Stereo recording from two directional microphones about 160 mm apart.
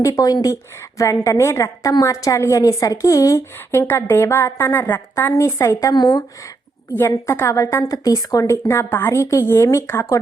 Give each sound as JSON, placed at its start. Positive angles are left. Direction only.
{"t": 0.0, "sound": "a woman's voice", "side_deg": 20}
{"t": 6.9, "sound": "a woman's voice", "side_deg": 15}